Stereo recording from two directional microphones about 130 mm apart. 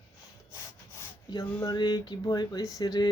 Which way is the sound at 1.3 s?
30° left (ahead or behind).